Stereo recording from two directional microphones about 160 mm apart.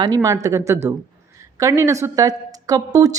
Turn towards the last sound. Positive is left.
turn(degrees=-20)  # may be behind; listen again after turning